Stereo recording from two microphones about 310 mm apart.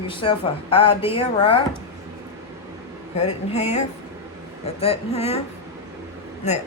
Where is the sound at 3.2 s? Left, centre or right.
Left.